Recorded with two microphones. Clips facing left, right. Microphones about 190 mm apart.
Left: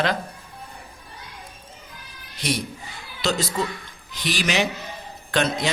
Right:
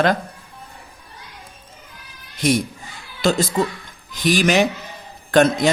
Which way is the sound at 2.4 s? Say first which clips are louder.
Right 8 dB; 50° right (ahead or behind).